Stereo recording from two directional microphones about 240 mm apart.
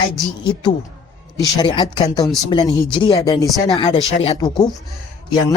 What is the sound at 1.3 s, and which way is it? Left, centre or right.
Speech, centre.